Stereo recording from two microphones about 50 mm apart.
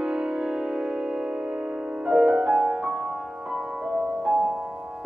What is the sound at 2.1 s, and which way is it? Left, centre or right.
Music, centre.